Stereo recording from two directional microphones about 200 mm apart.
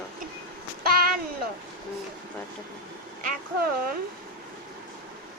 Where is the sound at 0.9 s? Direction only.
50° right (ahead or behind).